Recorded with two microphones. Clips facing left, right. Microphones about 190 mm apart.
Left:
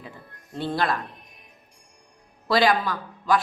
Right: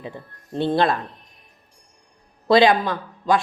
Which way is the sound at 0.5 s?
25° right (ahead or behind).